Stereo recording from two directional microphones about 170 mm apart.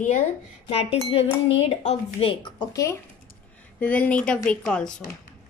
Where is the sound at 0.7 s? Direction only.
35° left (ahead or behind).